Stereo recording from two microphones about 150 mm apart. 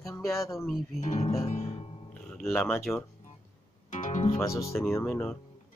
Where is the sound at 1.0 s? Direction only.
50° left (ahead or behind).